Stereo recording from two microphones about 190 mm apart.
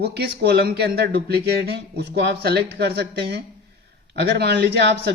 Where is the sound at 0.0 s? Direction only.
60° right (ahead or behind).